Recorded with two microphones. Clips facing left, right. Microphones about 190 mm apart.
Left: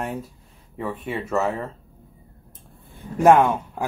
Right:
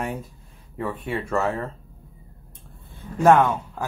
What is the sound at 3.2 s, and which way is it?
Speech, 15° left (ahead or behind).